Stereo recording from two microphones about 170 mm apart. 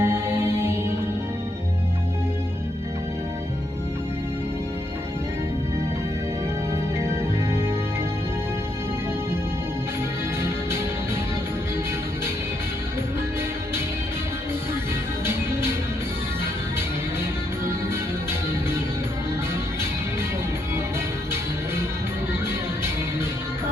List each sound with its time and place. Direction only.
0.0 s music: 15° right (ahead or behind)
7.0 s music: 15° right (ahead or behind)
10.4 s music: 15° right (ahead or behind)